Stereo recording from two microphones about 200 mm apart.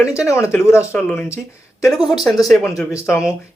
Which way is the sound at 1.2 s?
15° left (ahead or behind).